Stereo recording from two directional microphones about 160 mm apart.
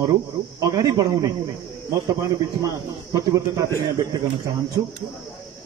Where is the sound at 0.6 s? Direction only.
20° right (ahead or behind).